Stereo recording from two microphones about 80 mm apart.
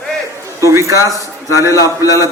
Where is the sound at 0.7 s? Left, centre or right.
Right.